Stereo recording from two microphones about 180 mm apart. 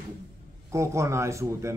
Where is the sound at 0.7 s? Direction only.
15° right (ahead or behind).